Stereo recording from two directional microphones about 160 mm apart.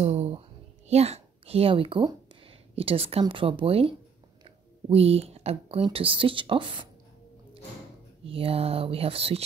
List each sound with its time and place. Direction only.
0.0 s a sound: 40° right (ahead or behind)
0.8 s speech: 40° right (ahead or behind)
8.2 s speech: 35° right (ahead or behind)